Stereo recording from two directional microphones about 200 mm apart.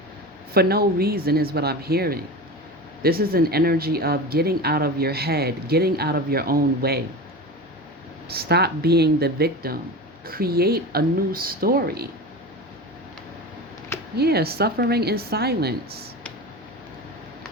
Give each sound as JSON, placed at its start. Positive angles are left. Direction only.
{"t": 0.5, "sound": "speech", "side_deg": -50}
{"t": 8.3, "sound": "speech", "side_deg": -50}
{"t": 14.2, "sound": "speech", "side_deg": -50}